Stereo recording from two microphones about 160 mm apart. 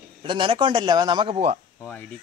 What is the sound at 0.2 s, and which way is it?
A man's voice, 30° right (ahead or behind).